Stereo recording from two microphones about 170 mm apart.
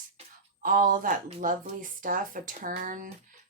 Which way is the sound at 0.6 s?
55° right (ahead or behind).